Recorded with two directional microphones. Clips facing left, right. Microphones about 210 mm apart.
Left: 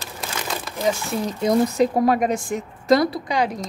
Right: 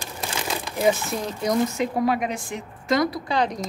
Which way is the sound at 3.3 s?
10° left (ahead or behind).